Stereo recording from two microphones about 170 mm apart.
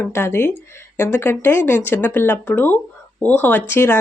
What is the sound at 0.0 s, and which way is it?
A woman's voice, 15° left (ahead or behind).